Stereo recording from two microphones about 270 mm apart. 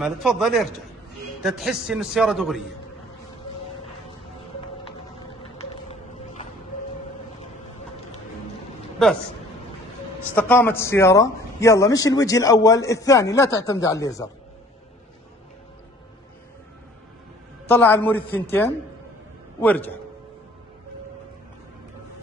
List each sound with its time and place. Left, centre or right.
0.0 s a man's voice: centre
5.4 s a sound: left
10.3 s a man's voice: centre
17.6 s a man's voice: centre